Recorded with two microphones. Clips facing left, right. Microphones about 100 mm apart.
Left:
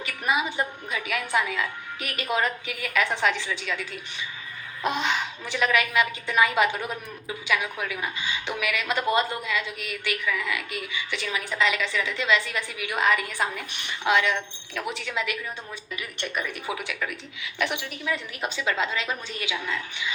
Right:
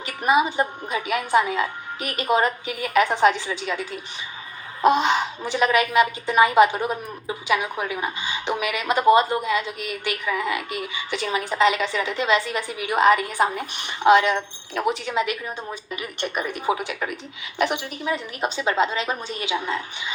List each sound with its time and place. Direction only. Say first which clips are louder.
0.1 s a woman's voice: right 7 dB; 35° right (ahead or behind)
5.0 s a woman's voice: right 6 dB; 30° right (ahead or behind)
18.0 s a woman's voice: right 4 dB; 25° right (ahead or behind)